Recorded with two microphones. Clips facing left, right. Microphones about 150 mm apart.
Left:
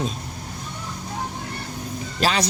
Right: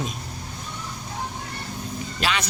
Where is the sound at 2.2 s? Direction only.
40° left (ahead or behind).